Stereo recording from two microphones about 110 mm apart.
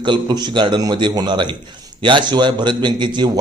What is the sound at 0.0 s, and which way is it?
A man's voice, 45° right (ahead or behind).